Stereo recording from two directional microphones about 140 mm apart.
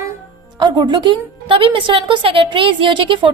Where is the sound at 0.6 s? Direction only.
35° right (ahead or behind).